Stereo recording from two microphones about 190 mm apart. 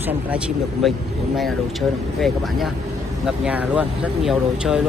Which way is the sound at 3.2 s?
5° right (ahead or behind).